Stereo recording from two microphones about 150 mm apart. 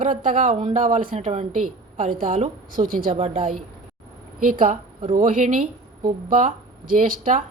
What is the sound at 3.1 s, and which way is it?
Speech, 40° right (ahead or behind).